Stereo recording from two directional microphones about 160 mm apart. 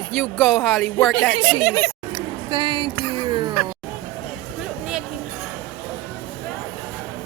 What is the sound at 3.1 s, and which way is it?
Music, 30° right (ahead or behind).